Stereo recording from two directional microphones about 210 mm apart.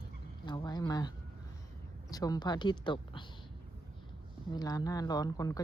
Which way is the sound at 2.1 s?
15° left (ahead or behind).